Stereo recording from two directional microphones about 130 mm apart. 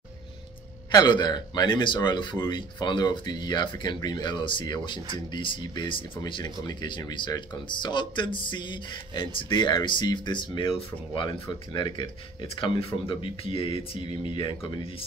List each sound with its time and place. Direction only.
0.9 s speech: 35° left (ahead or behind)